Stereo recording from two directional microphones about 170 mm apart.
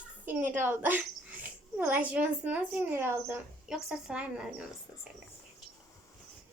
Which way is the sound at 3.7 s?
5° right (ahead or behind).